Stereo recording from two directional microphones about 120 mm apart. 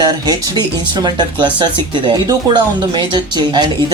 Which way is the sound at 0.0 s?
35° right (ahead or behind).